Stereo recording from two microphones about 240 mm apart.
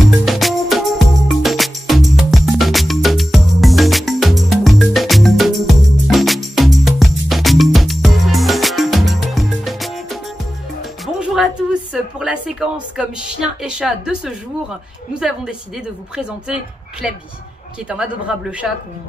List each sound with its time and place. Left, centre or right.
0.0 s music: centre
11.1 s a sound: centre
15.1 s a woman's voice: centre
17.8 s a woman's voice: centre